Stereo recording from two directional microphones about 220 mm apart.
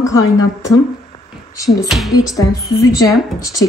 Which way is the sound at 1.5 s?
15° left (ahead or behind).